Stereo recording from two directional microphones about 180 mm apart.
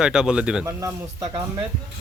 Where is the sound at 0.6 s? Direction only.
15° right (ahead or behind).